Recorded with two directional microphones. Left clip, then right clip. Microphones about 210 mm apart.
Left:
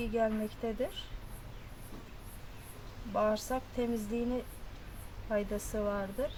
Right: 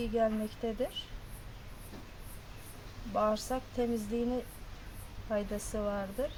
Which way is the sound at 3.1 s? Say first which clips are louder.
Even; 15° left (ahead or behind).